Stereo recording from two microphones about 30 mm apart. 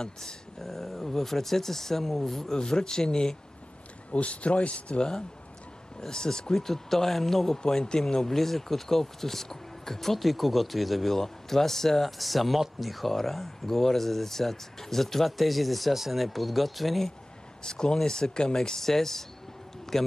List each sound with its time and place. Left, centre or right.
0.0 s speech: left
0.6 s speech: centre
2.5 s speech: left
4.1 s speech: left
5.9 s speech: left
6.5 s speech: centre
7.6 s speech: left
8.1 s speech: centre
11.1 s speech: centre
17.6 s speech: left
18.8 s speech: centre